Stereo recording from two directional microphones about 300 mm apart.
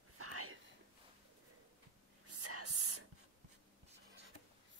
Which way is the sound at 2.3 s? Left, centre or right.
Right.